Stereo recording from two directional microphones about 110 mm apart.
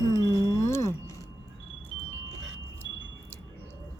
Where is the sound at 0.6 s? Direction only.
25° left (ahead or behind).